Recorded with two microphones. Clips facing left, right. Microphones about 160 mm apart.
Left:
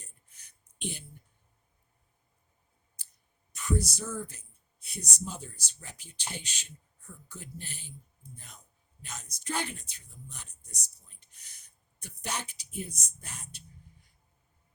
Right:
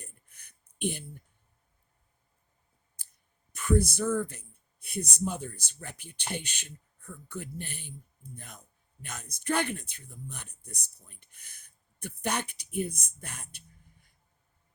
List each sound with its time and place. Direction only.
0.0 s a sound: 60° right (ahead or behind)
3.0 s clicking: 55° right (ahead or behind)
3.5 s speech: 55° right (ahead or behind)